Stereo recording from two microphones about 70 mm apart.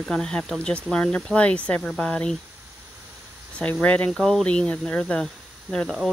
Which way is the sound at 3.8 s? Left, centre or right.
Centre.